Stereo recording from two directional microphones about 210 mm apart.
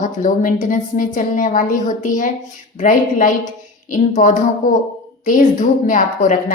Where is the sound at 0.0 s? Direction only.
40° left (ahead or behind).